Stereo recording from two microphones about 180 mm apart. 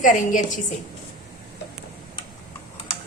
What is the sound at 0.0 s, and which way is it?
Speech, 45° left (ahead or behind).